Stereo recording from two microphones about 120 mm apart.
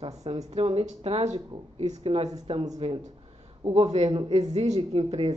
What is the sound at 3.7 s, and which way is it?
Speech, 65° right (ahead or behind).